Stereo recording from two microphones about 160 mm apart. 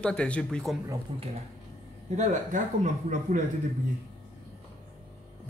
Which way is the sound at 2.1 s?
50° right (ahead or behind).